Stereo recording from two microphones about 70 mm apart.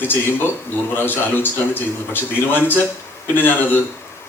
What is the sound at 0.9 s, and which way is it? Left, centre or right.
A man's voice, left.